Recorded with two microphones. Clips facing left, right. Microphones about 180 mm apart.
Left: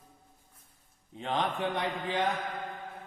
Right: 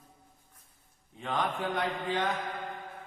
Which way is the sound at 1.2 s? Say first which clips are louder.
Left 1 dB; 25° left (ahead or behind).